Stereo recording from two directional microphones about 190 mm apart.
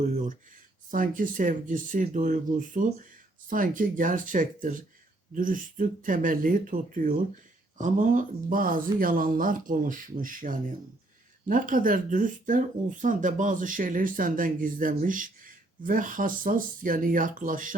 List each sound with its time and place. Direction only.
0.0 s speech: 45° right (ahead or behind)